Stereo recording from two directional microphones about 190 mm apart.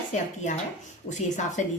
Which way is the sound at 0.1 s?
40° left (ahead or behind).